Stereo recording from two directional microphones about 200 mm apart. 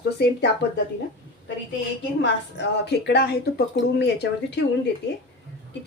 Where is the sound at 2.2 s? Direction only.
60° left (ahead or behind).